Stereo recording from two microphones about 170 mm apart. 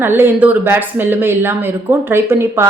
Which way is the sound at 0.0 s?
10° right (ahead or behind).